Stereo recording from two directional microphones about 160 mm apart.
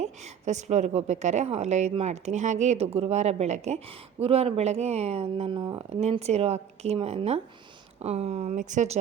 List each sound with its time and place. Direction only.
0.0 s a woman's voice: 45° right (ahead or behind); by 5.8 s 25° right (ahead or behind)
5.9 s speech: 40° right (ahead or behind)